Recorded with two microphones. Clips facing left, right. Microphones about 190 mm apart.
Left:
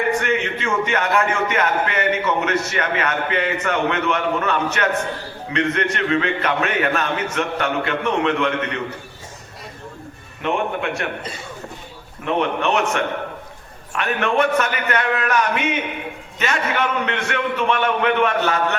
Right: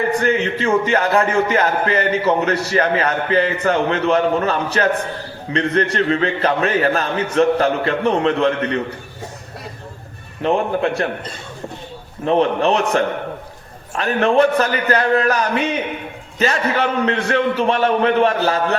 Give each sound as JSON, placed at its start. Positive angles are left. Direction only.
{"t": 0.1, "sound": "a man's voice", "side_deg": -35}
{"t": 10.4, "sound": "a man's voice", "side_deg": -35}
{"t": 12.2, "sound": "a man's voice", "side_deg": -35}